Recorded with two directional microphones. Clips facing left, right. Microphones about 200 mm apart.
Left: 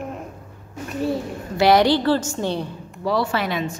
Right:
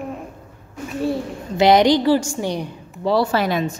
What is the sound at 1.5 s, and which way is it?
A woman's voice, 20° right (ahead or behind).